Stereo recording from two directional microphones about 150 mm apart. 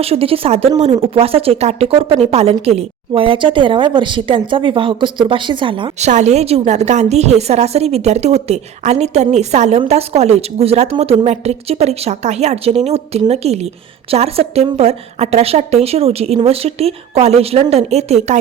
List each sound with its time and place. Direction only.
0.0 s a woman's voice: 40° right (ahead or behind)
6.0 s a woman's voice: 50° right (ahead or behind)